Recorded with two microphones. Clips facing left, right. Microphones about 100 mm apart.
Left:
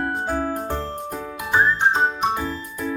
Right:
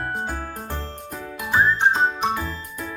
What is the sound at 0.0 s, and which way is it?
Music, 20° left (ahead or behind).